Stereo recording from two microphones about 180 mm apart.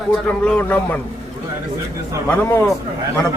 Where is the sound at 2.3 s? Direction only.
10° left (ahead or behind).